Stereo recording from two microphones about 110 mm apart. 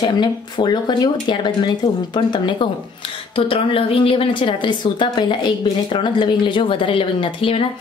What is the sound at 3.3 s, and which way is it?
A woman's voice, 55° left (ahead or behind).